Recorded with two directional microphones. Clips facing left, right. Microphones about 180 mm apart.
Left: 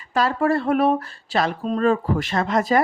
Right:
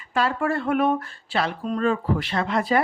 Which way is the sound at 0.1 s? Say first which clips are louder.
Left 4 dB; 40° left (ahead or behind).